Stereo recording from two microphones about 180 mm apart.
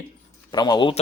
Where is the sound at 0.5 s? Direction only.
20° left (ahead or behind).